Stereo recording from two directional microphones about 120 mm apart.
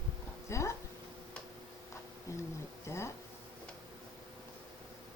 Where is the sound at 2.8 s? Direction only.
25° left (ahead or behind).